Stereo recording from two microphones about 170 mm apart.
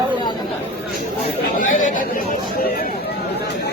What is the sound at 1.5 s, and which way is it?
Chatter, 50° left (ahead or behind).